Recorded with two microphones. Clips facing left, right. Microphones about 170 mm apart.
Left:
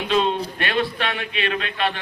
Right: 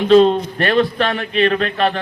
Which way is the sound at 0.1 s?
45° right (ahead or behind).